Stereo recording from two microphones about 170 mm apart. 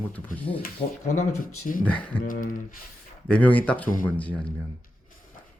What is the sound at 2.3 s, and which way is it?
Speech, 55° left (ahead or behind).